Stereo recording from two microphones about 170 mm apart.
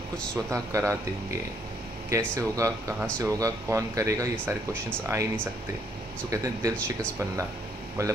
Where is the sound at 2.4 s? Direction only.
20° right (ahead or behind).